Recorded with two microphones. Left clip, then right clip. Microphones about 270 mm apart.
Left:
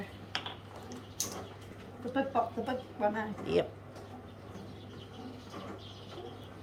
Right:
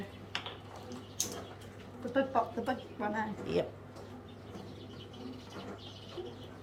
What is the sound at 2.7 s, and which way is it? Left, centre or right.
Speech, centre.